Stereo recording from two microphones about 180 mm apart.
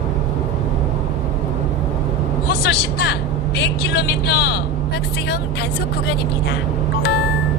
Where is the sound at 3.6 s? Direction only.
70° left (ahead or behind).